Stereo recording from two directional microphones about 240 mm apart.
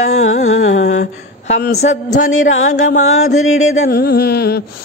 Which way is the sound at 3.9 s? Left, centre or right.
Left.